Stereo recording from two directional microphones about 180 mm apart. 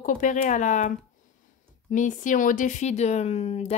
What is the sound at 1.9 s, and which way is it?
Speech, 45° left (ahead or behind).